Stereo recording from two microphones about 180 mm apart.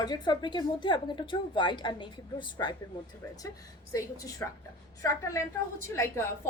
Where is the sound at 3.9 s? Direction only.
15° left (ahead or behind).